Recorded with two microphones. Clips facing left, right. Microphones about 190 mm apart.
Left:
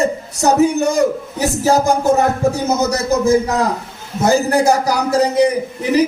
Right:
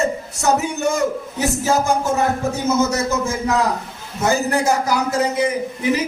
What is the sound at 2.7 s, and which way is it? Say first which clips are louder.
Speech: left 2 dB; 35° left (ahead or behind).